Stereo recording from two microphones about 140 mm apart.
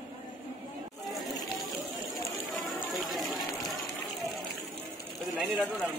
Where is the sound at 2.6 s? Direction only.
Centre (ahead or behind).